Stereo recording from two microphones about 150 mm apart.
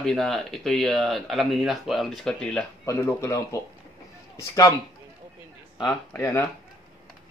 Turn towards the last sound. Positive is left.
turn(degrees=20)  # may be behind; listen again after turning